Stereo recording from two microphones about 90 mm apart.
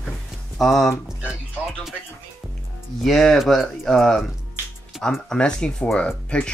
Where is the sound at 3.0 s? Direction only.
Centre (ahead or behind).